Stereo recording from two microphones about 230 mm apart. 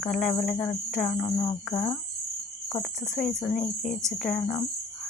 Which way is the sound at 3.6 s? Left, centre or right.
Left.